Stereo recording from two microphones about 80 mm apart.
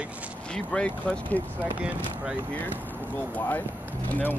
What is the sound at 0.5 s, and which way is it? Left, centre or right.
Speech, centre.